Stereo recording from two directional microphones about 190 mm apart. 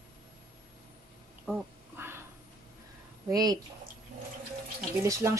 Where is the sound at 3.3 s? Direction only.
20° right (ahead or behind).